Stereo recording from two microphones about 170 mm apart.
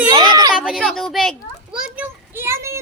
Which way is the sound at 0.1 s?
25° right (ahead or behind).